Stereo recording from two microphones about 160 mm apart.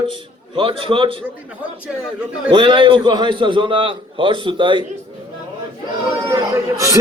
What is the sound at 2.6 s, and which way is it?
A man's voice, 30° right (ahead or behind).